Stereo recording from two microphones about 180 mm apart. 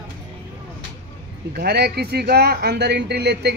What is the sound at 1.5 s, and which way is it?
Speech, 60° right (ahead or behind).